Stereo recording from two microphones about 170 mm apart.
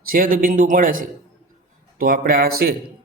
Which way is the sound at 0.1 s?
55° right (ahead or behind).